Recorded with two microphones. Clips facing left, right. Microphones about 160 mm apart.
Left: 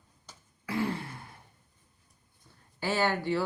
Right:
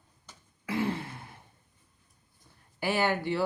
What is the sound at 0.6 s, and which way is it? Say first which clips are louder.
Throat clearing: right 1 dB; 20° right (ahead or behind).